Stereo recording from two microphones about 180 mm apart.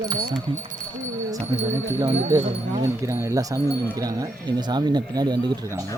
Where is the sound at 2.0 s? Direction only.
20° right (ahead or behind).